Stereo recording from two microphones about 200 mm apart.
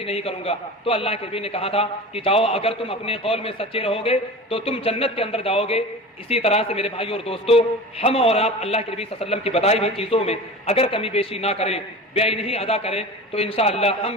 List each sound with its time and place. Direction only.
0.0 s a man's voice: 30° left (ahead or behind)